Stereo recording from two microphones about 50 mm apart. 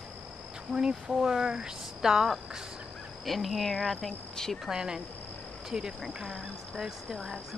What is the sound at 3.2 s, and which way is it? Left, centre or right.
Cricket, centre.